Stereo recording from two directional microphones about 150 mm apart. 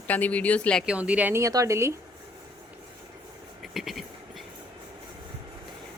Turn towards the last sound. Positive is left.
turn(degrees=0)  # may be behind; listen again after turning